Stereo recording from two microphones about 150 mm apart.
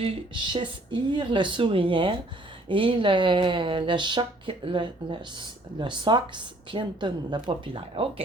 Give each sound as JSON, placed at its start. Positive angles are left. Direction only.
{"t": 0.0, "sound": "speech", "side_deg": -35}